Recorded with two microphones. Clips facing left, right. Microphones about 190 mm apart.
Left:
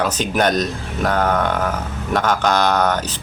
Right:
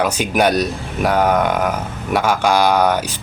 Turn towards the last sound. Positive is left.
turn(degrees=-10)  # may be behind; listen again after turning